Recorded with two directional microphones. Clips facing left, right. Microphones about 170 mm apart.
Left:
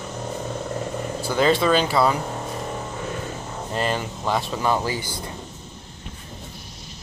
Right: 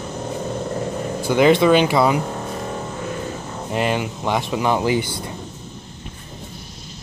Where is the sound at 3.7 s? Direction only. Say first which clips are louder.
Right 4 dB; 10° right (ahead or behind).